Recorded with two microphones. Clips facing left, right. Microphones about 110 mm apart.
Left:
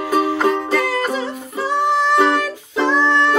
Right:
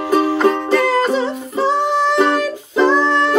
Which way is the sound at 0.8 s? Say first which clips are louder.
Right 5 dB; 25° right (ahead or behind).